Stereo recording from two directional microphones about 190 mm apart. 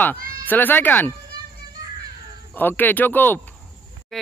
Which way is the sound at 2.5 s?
10° left (ahead or behind).